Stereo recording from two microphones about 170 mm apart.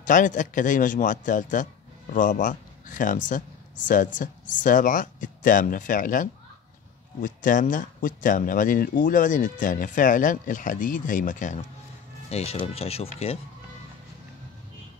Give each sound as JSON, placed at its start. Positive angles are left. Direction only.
{"t": 0.0, "sound": "speech", "side_deg": 50}
{"t": 12.3, "sound": "speech", "side_deg": 40}